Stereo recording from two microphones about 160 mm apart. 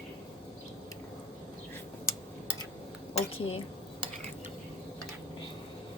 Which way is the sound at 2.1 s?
20° left (ahead or behind).